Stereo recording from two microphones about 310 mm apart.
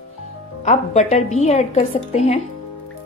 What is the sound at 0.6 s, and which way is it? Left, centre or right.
Speech, left.